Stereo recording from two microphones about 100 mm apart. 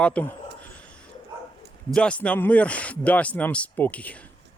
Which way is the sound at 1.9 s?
10° left (ahead or behind).